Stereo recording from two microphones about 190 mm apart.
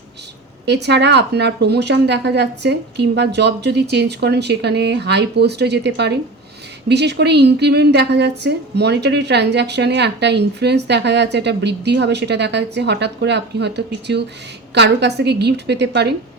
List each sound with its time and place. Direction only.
0.6 s a woman's voice: 65° right (ahead or behind)